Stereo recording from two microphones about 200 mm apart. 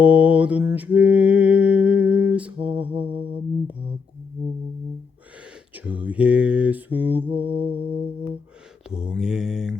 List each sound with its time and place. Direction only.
0.0 s mantra: 5° right (ahead or behind)
5.7 s mantra: 5° right (ahead or behind)
7.8 s music: 25° right (ahead or behind)
8.9 s mantra: 5° right (ahead or behind)